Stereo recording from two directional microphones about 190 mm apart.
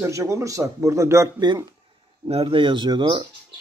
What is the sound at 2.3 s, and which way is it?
Speech, 30° right (ahead or behind).